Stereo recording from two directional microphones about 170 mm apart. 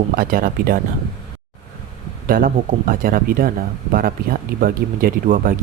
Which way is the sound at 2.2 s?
55° right (ahead or behind).